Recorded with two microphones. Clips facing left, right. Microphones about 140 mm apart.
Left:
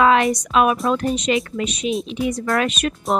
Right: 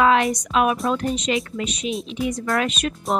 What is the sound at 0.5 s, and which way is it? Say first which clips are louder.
A woman's voice: left 2 dB; 75° left (ahead or behind).